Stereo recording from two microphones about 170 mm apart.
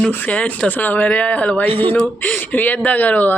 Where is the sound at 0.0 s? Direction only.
10° left (ahead or behind).